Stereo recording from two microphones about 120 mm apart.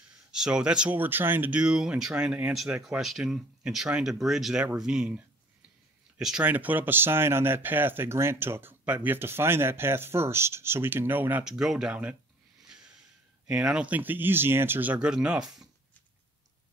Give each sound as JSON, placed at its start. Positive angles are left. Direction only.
{"t": 0.3, "sound": "speech", "side_deg": -5}
{"t": 12.6, "sound": "snort", "side_deg": -5}
{"t": 13.5, "sound": "speech", "side_deg": -10}